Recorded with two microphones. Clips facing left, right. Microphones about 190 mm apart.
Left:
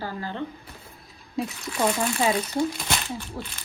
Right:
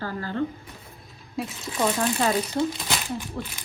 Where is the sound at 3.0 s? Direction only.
15° right (ahead or behind).